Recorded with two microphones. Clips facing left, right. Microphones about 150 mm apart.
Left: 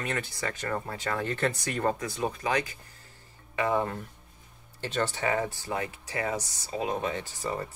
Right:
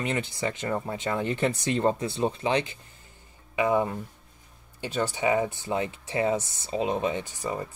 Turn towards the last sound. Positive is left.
turn(degrees=-15)  # may be behind; listen again after turning